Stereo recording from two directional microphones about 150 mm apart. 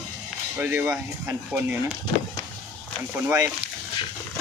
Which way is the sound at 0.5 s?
10° right (ahead or behind).